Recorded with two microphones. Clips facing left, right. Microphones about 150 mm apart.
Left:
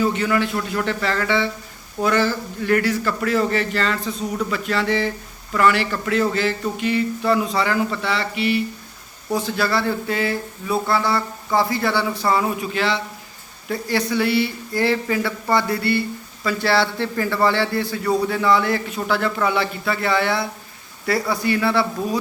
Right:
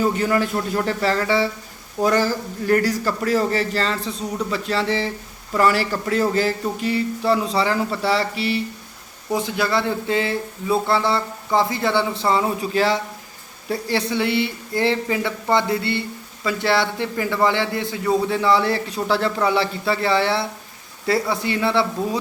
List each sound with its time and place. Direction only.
0.0 s a man's voice: 40° right (ahead or behind)
9.3 s speech: 20° right (ahead or behind)